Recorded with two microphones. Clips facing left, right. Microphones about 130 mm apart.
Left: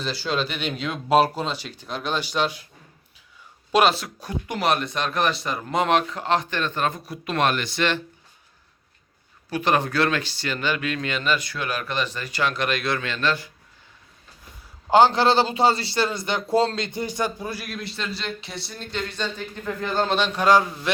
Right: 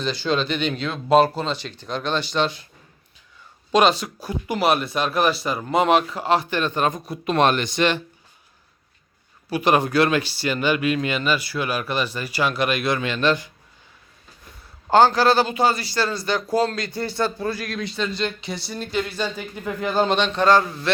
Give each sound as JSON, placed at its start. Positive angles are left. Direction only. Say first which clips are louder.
{"t": 0.0, "sound": "speech", "louder": "right 3 dB", "side_deg": 5}
{"t": 3.7, "sound": "speech", "louder": "right 2 dB", "side_deg": 5}
{"t": 9.5, "sound": "speech", "louder": "right 3 dB", "side_deg": -15}
{"t": 14.8, "sound": "a man's voice", "louder": "right 1 dB", "side_deg": 15}
{"t": 20.1, "sound": "speech", "louder": "even", "side_deg": 5}